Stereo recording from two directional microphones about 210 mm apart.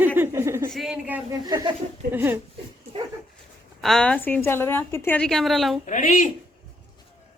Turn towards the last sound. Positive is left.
turn(degrees=40)  # may be behind; listen again after turning